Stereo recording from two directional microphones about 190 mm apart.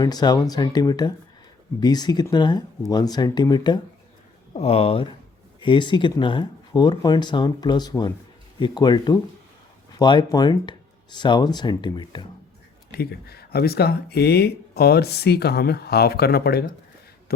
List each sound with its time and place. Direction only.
0.0 s speech: 20° left (ahead or behind)
12.9 s speech: 55° left (ahead or behind)